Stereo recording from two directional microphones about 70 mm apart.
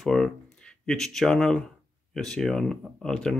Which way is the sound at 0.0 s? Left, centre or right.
Centre.